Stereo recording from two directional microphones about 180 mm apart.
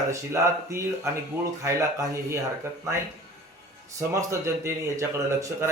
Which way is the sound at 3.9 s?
15° right (ahead or behind).